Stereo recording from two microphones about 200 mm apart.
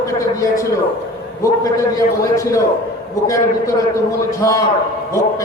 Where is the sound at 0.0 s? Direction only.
15° left (ahead or behind).